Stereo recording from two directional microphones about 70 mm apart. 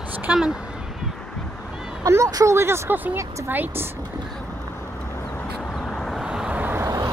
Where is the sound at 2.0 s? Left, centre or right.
Right.